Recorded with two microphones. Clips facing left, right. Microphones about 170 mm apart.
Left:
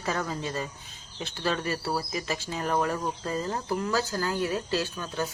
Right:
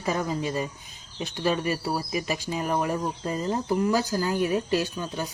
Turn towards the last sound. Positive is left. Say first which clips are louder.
# right 1 dB
turn(degrees=-15)  # may be behind; listen again after turning